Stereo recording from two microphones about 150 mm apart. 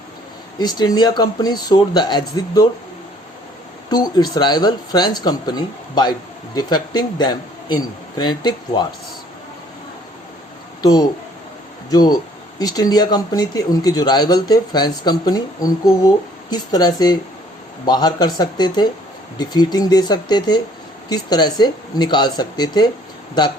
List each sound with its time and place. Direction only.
0.6 s speech: 30° left (ahead or behind)
3.8 s speech: 25° left (ahead or behind)
11.9 s speech: 25° left (ahead or behind)